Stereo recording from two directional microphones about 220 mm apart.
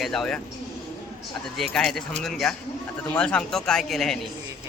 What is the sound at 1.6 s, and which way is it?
Speech, centre (ahead or behind).